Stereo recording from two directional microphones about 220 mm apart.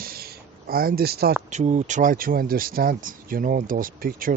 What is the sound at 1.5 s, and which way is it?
Speech, 30° right (ahead or behind).